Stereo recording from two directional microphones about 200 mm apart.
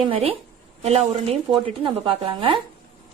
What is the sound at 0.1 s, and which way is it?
A woman's voice, 30° right (ahead or behind).